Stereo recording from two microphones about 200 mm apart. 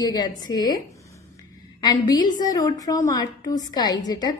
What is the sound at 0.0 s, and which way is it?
Speech, 20° left (ahead or behind).